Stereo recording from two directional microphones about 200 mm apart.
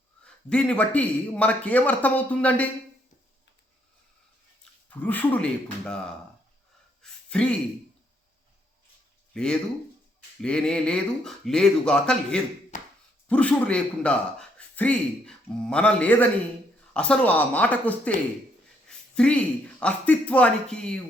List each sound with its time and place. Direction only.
0.3 s a man's voice: 5° left (ahead or behind)
4.9 s a man's voice: 10° left (ahead or behind)
7.0 s a sound: 5° left (ahead or behind)
9.3 s speech: 5° left (ahead or behind)
12.7 s a sound: 40° left (ahead or behind)
13.2 s a man's voice: 5° left (ahead or behind)